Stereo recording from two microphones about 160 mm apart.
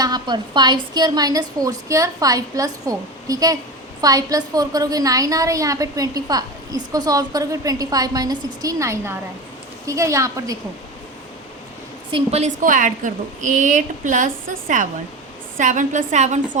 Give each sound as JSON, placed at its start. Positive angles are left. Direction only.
{"t": 0.0, "sound": "a woman's voice", "side_deg": -25}
{"t": 12.1, "sound": "a woman's voice", "side_deg": -45}